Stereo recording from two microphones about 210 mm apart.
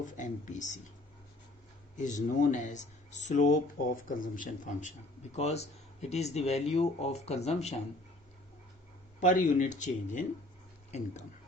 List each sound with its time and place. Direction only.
0.0 s speech: 35° left (ahead or behind)
2.0 s speech: 35° left (ahead or behind)
9.2 s speech: 35° left (ahead or behind)